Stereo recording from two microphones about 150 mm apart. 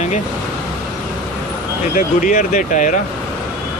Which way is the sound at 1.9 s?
60° left (ahead or behind).